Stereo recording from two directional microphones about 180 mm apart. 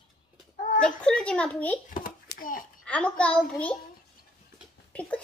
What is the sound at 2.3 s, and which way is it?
Speech, 50° left (ahead or behind).